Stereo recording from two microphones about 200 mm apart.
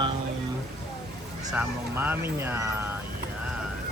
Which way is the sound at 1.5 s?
10° right (ahead or behind).